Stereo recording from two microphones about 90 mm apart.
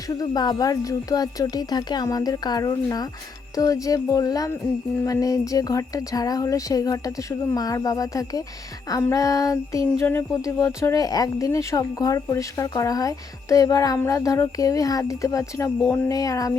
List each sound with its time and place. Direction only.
0.1 s speech: 45° left (ahead or behind)